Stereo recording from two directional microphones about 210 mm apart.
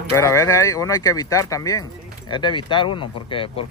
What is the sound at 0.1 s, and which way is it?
Speech, 15° left (ahead or behind).